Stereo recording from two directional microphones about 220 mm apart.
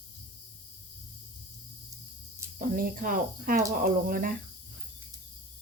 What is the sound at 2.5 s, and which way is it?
Speech, 40° right (ahead or behind).